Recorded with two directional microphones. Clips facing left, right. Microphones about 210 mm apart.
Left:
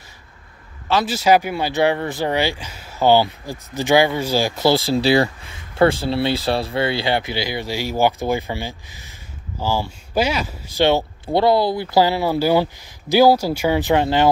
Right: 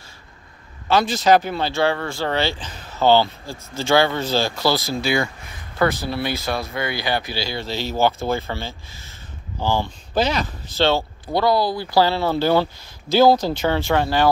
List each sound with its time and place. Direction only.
0.8 s speech: 5° left (ahead or behind); by 14.3 s 20° left (ahead or behind)